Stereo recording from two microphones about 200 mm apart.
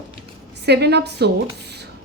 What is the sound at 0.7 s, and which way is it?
Speech, 55° right (ahead or behind).